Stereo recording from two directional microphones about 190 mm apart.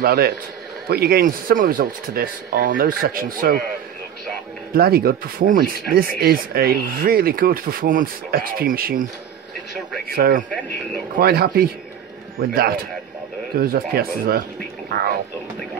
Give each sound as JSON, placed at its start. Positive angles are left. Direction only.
{"t": 0.0, "sound": "a man's voice", "side_deg": -55}
{"t": 4.7, "sound": "speech", "side_deg": -55}
{"t": 10.0, "sound": "speech", "side_deg": -50}